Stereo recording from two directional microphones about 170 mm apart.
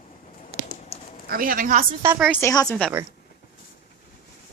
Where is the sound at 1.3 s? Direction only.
55° right (ahead or behind).